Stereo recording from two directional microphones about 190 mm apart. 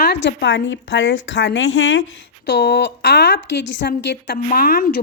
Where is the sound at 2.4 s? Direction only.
65° left (ahead or behind).